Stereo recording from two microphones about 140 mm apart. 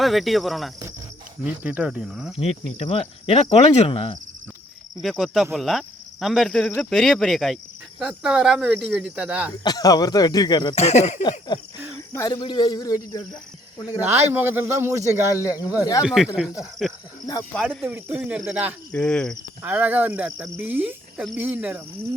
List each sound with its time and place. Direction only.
0.0 s speech: centre (ahead or behind)
2.3 s cricket: 45° left (ahead or behind)
4.9 s speech: centre (ahead or behind)
9.6 s speech: 30° left (ahead or behind)
10.8 s cricket: 50° left (ahead or behind)
11.2 s a sound: 30° left (ahead or behind)
11.9 s speech: 25° left (ahead or behind)
14.3 s speech: 15° right (ahead or behind)
15.7 s speech: 25° left (ahead or behind)
16.0 s speech: 5° right (ahead or behind)
18.9 s speech: 5° left (ahead or behind)
19.6 s speech: 15° right (ahead or behind)
20.6 s cricket: 10° right (ahead or behind)
21.3 s speech: 10° right (ahead or behind)